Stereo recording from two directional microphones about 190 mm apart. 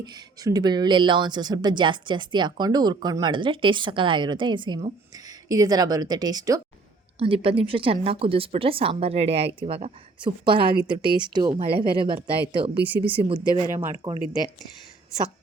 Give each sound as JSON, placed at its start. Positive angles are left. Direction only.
{"t": 0.0, "sound": "speech", "side_deg": -20}
{"t": 7.2, "sound": "speech", "side_deg": -30}